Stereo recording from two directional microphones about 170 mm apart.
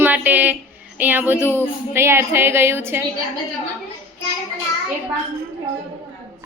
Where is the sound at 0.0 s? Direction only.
10° right (ahead or behind).